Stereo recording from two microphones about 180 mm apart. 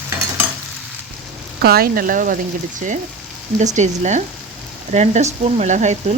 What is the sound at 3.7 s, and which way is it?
Speech, 40° right (ahead or behind).